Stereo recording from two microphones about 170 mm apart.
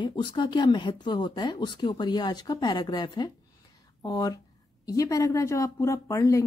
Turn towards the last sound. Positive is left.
turn(degrees=20)  # may be behind; listen again after turning